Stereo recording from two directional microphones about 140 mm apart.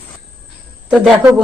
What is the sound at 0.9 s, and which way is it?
Speech, centre (ahead or behind).